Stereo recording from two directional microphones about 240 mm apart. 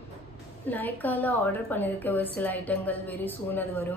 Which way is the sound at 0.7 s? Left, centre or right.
Centre.